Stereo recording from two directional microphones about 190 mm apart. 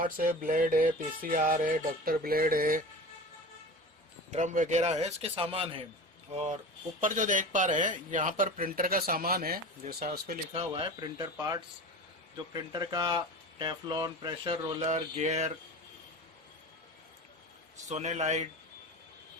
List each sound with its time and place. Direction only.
0.0 s speech: 45° right (ahead or behind)
4.3 s speech: 40° right (ahead or behind)
10.5 s speech: 25° right (ahead or behind)
12.7 s speech: 25° right (ahead or behind)
14.8 s speech: 35° right (ahead or behind)
17.8 s speech: 40° right (ahead or behind)